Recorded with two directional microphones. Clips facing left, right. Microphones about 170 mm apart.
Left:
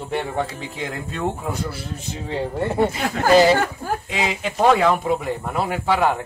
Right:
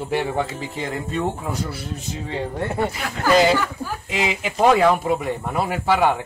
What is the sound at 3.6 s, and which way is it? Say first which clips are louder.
Speech: left 3 dB; 50° left (ahead or behind).